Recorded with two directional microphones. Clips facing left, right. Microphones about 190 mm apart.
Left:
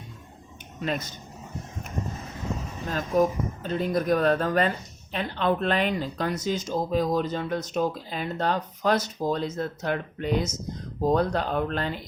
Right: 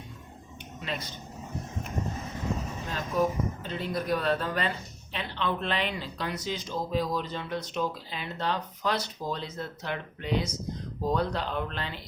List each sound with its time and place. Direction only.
0.8 s speech: 45° left (ahead or behind)
2.9 s speech: 45° left (ahead or behind)